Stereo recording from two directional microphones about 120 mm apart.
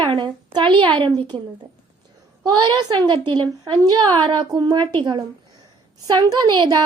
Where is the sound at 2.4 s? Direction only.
35° right (ahead or behind).